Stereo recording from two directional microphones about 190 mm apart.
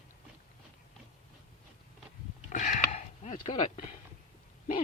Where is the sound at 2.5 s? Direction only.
40° left (ahead or behind).